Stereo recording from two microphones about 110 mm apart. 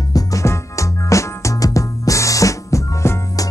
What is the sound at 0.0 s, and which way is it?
Music, 35° left (ahead or behind).